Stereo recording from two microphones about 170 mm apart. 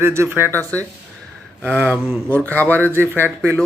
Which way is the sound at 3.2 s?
15° right (ahead or behind).